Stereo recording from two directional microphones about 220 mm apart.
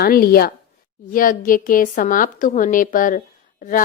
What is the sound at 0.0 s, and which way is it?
A woman's voice, 45° left (ahead or behind).